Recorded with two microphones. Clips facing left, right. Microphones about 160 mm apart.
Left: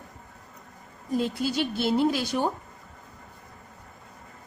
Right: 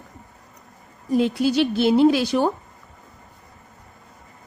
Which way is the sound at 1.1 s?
80° right.